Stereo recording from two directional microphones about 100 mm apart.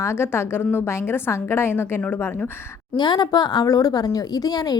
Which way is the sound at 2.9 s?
45° left (ahead or behind).